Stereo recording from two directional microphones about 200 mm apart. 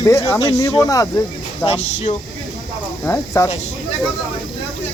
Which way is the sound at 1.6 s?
35° left (ahead or behind).